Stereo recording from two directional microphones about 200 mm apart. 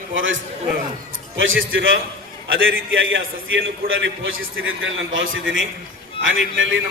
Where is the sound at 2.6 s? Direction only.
75° right (ahead or behind).